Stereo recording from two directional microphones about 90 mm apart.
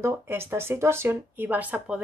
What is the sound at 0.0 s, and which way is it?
Speech, 25° right (ahead or behind).